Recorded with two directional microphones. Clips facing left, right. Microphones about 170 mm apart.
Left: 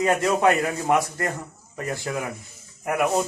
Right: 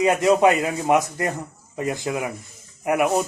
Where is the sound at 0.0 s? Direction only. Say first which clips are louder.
Right 3 dB; 20° right (ahead or behind).